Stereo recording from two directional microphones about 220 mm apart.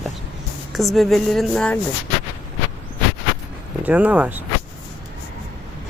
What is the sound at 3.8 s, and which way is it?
Speech, 5° right (ahead or behind).